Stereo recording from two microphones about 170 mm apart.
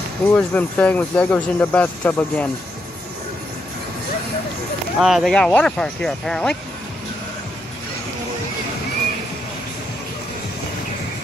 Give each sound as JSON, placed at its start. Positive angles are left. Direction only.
{"t": 0.3, "sound": "speech", "side_deg": 10}
{"t": 4.9, "sound": "speech", "side_deg": -5}